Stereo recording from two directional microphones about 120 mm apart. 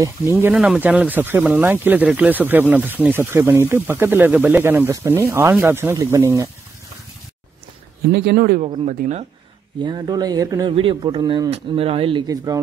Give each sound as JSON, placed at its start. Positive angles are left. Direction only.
{"t": 0.0, "sound": "speech", "side_deg": -20}
{"t": 0.6, "sound": "speech", "side_deg": -10}
{"t": 8.8, "sound": "speech", "side_deg": -85}
{"t": 9.8, "sound": "speech", "side_deg": -35}
{"t": 10.7, "sound": "speech", "side_deg": -45}
{"t": 11.5, "sound": "speech", "side_deg": -55}